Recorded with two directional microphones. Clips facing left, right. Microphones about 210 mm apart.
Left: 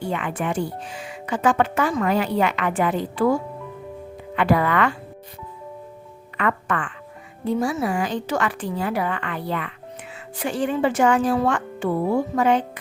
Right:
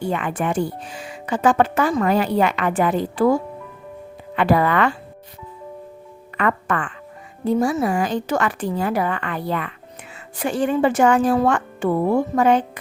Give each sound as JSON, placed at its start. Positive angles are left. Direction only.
{"t": 0.1, "sound": "speech", "side_deg": -45}
{"t": 4.4, "sound": "speech", "side_deg": -35}
{"t": 6.3, "sound": "speech", "side_deg": -40}